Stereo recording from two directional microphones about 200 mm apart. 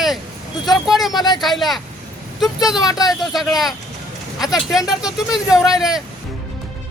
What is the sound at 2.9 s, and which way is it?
Speech, 20° left (ahead or behind).